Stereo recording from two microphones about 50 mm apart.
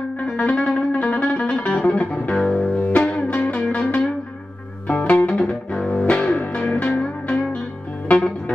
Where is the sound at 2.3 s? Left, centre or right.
Centre.